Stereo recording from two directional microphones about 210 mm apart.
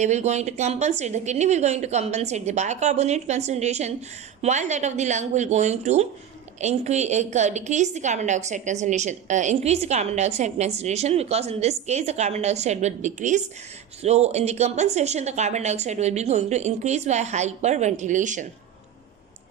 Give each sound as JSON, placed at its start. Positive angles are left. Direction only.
{"t": 0.0, "sound": "a woman's voice", "side_deg": -35}